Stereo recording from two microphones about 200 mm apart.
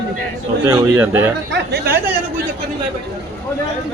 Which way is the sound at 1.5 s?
55° right (ahead or behind).